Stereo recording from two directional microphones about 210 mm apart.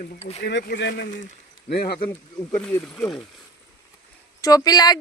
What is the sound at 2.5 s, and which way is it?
Speech, 10° left (ahead or behind).